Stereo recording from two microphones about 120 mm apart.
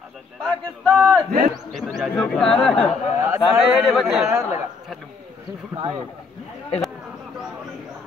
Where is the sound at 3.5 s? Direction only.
Centre (ahead or behind).